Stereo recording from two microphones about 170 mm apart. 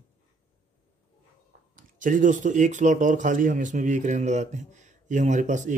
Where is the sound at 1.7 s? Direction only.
50° right (ahead or behind).